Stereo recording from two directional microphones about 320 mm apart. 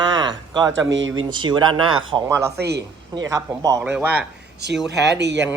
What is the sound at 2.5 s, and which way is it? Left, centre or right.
Speech, right.